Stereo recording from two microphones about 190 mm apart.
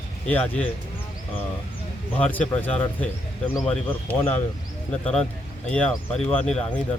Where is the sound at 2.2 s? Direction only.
10° left (ahead or behind).